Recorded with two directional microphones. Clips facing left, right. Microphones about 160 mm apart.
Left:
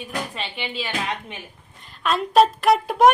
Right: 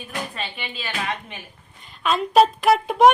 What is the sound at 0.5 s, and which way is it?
Speech, 15° left (ahead or behind).